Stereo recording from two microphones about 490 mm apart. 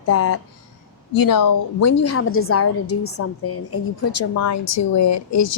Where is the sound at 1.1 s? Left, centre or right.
Left.